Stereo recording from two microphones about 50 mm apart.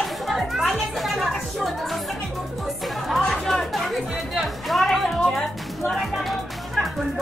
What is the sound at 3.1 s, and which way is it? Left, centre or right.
Chatter, centre.